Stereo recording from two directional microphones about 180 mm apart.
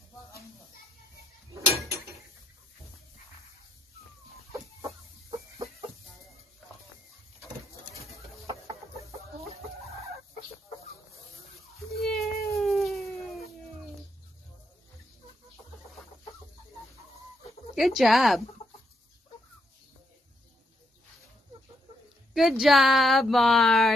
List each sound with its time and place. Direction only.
12.0 s cat: centre (ahead or behind)
17.7 s speech: centre (ahead or behind)
22.3 s speech: centre (ahead or behind)